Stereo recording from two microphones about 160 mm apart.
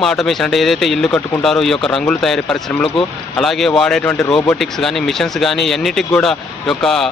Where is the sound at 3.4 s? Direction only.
Centre (ahead or behind).